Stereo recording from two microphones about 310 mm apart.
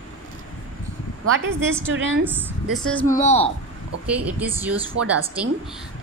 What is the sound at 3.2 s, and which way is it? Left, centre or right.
Speech, left.